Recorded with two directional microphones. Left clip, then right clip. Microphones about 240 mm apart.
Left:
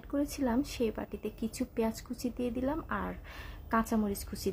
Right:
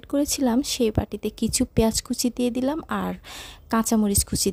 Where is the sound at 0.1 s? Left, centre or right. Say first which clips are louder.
Right 9 dB; right.